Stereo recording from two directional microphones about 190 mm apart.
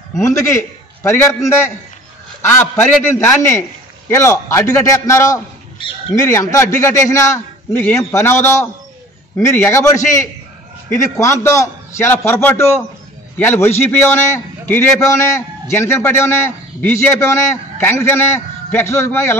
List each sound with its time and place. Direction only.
0.2 s a man's voice: 15° left (ahead or behind)